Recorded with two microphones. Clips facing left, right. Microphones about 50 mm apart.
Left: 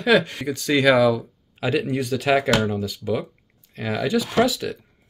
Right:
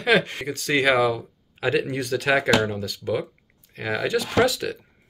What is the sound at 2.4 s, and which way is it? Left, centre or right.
Speech, right.